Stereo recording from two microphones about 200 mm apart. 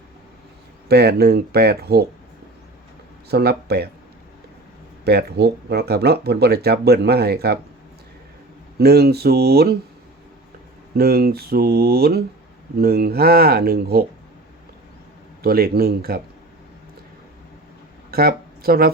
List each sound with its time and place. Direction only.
0.9 s speech: 55° right (ahead or behind)
3.2 s speech: 55° right (ahead or behind)
5.0 s speech: 55° right (ahead or behind)
8.8 s speech: 50° right (ahead or behind)
10.9 s speech: 50° right (ahead or behind)
15.4 s speech: 50° right (ahead or behind)
18.1 s speech: 50° right (ahead or behind)